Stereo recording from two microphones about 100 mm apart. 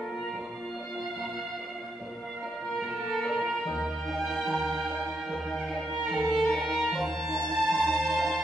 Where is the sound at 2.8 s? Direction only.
Centre (ahead or behind).